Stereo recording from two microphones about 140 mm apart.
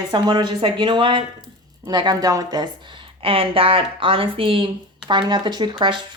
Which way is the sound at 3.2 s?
40° right (ahead or behind).